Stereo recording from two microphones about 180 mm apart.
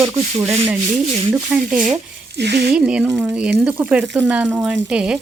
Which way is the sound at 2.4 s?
65° right (ahead or behind).